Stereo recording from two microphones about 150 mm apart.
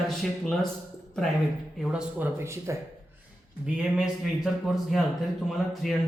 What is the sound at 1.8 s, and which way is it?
Speech, 5° right (ahead or behind).